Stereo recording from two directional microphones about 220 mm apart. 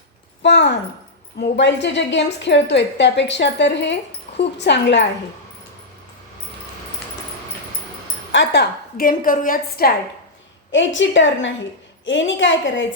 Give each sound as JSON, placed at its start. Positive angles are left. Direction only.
{"t": 0.4, "sound": "a woman's voice", "side_deg": 50}
{"t": 8.3, "sound": "a woman's voice", "side_deg": 55}
{"t": 10.7, "sound": "a woman's voice", "side_deg": 55}